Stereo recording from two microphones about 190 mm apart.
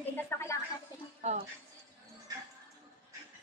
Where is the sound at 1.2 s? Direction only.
35° right (ahead or behind).